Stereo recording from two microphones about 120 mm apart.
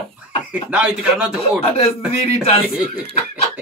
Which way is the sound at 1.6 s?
55° left (ahead or behind).